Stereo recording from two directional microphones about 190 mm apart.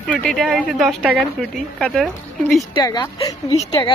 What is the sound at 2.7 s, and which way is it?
A woman's voice, 20° left (ahead or behind).